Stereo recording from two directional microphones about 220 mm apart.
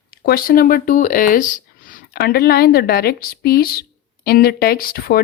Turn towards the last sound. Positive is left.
turn(degrees=45)  # may be behind; listen again after turning